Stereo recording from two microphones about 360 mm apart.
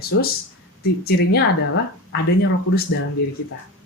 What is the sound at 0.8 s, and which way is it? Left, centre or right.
Speech, left.